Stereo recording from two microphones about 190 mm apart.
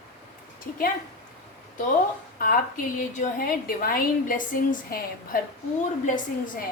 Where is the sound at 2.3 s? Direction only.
45° left (ahead or behind).